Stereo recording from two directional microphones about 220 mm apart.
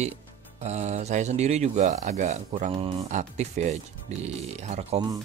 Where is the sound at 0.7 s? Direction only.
30° right (ahead or behind).